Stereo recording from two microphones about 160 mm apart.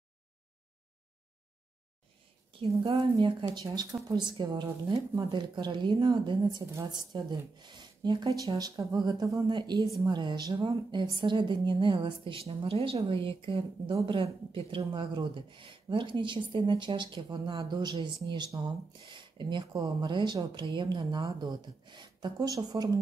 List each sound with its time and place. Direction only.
2.9 s a woman's voice: 30° right (ahead or behind)